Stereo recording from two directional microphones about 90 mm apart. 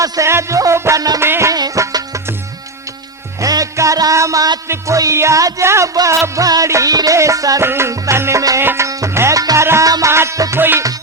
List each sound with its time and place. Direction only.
0.0 s music: 30° right (ahead or behind)
1.5 s music: 40° right (ahead or behind)
3.4 s music: 40° right (ahead or behind)
7.6 s music: 30° right (ahead or behind)
9.4 s music: 45° right (ahead or behind)
9.6 s music: 30° right (ahead or behind)
10.6 s music: 20° right (ahead or behind)